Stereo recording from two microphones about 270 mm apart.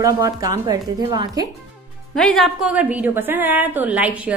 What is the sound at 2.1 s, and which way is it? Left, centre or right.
A woman's voice, centre.